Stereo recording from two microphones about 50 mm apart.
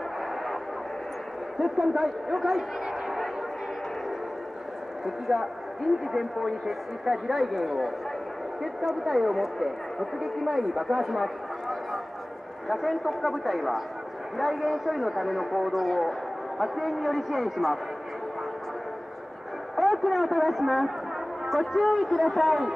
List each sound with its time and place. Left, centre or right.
1.6 s a man's voice: centre
2.8 s a sound: centre
5.0 s a man's voice: centre
7.5 s a man's voice: centre
9.0 s a man's voice: centre
19.7 s a man's voice: centre